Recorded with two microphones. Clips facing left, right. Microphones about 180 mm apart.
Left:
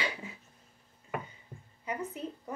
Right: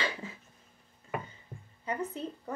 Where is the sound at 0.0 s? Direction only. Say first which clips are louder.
Right 1 dB; 15° left (ahead or behind).